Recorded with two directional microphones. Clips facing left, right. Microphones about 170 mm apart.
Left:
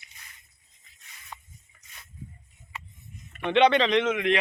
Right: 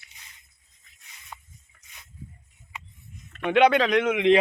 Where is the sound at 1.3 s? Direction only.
5° right (ahead or behind).